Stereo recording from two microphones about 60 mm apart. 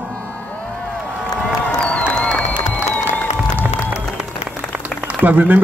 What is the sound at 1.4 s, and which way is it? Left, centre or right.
Crowd, centre.